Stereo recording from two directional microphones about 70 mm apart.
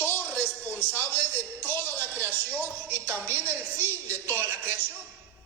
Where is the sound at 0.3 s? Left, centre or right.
Centre.